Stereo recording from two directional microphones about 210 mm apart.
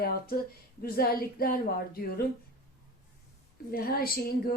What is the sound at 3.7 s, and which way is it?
Speech, 45° left (ahead or behind).